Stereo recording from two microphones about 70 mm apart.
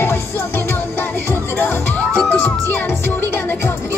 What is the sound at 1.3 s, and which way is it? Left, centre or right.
Music, left.